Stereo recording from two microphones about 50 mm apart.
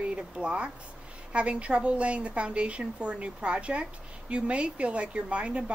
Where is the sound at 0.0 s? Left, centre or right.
Right.